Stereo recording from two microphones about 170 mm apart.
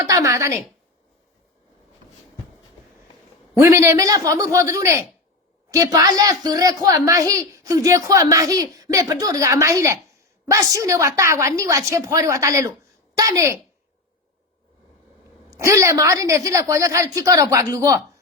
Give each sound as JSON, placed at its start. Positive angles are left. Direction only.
{"t": 0.0, "sound": "a woman's voice", "side_deg": -20}
{"t": 3.6, "sound": "a woman's voice", "side_deg": -15}
{"t": 15.4, "sound": "a woman's voice", "side_deg": -20}